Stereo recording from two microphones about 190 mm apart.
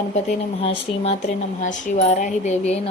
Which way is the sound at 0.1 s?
35° left (ahead or behind).